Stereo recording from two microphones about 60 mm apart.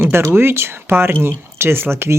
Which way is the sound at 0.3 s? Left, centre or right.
Right.